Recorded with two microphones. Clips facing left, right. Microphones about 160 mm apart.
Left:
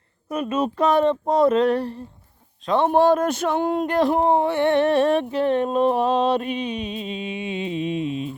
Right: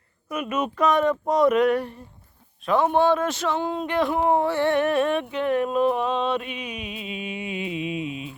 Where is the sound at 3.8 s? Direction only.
40° left (ahead or behind).